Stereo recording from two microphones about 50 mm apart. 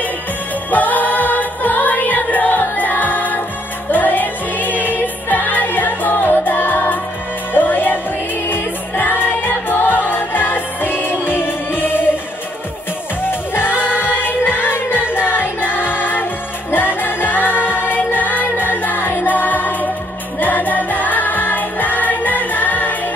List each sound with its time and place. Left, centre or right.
0.7 s music: left
13.2 s music: left